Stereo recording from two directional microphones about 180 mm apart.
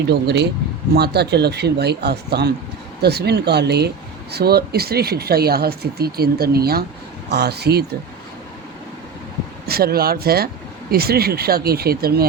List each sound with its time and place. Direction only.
0.1 s speech: 65° right (ahead or behind)
9.6 s speech: 60° right (ahead or behind)